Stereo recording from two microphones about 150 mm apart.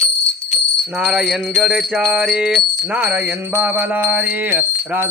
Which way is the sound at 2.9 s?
10° right (ahead or behind).